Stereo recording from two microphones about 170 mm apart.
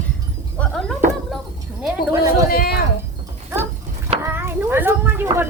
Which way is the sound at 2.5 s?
65° left (ahead or behind).